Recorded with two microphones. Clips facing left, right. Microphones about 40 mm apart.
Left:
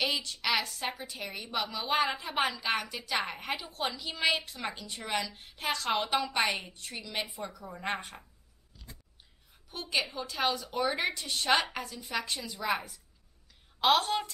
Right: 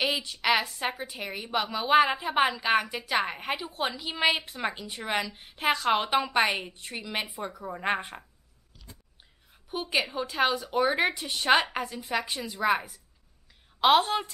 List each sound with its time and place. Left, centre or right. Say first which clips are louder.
0.1 s a woman's voice: right 5 dB; centre
9.7 s a woman's voice: right 4 dB; centre